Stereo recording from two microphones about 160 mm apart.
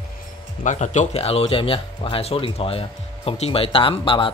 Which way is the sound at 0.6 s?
50° left (ahead or behind).